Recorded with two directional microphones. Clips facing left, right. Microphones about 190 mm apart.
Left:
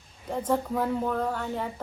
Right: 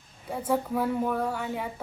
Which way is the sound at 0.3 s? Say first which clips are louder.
Left 1 dB; 10° right (ahead or behind).